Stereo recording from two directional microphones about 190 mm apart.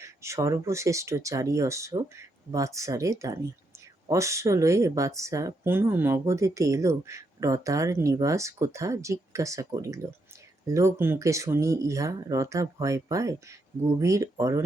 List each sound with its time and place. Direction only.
0.0 s speech: 15° right (ahead or behind)